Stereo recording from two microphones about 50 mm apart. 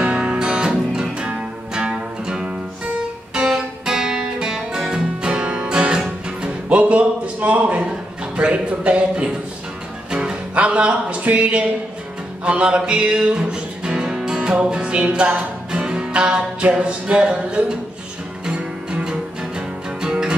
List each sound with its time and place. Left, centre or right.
0.0 s music: right
8.4 s a sound: right
10.1 s music: centre
10.6 s a man's voice: right
12.4 s music: right
14.4 s music: right